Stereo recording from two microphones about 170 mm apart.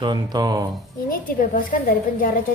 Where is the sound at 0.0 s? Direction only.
25° right (ahead or behind).